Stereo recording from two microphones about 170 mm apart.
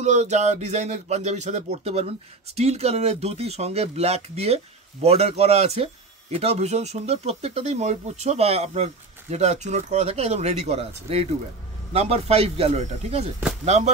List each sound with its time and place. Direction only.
0.0 s speech: 45° right (ahead or behind)
11.9 s speech: 35° right (ahead or behind)